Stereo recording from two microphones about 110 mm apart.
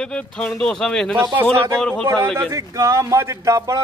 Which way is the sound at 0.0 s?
10° left (ahead or behind).